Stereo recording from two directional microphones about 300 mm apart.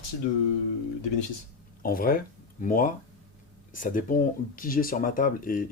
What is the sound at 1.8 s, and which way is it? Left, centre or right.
Speech, left.